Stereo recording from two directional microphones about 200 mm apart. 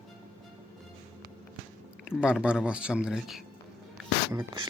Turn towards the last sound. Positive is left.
turn(degrees=-15)  # may be behind; listen again after turning